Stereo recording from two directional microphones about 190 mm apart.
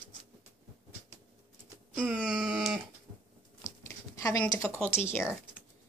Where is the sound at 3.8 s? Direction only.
15° left (ahead or behind).